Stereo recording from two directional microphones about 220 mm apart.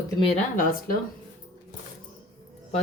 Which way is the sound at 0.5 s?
40° left (ahead or behind).